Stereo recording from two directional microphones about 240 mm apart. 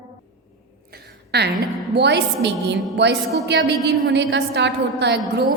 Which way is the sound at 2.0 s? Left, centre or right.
Right.